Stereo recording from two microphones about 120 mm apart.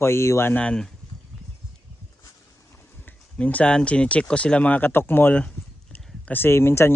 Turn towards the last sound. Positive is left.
turn(degrees=20)  # may be behind; listen again after turning